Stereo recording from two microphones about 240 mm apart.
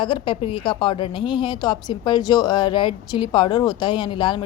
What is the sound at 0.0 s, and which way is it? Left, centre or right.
A woman's voice, left.